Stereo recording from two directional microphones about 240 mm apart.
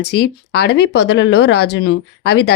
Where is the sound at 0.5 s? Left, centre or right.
Left.